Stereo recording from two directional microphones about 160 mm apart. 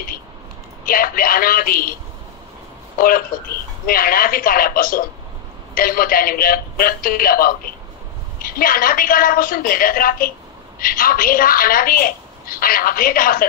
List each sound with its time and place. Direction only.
0.8 s a woman's voice: 65° left (ahead or behind)
3.0 s a woman's voice: 65° left (ahead or behind)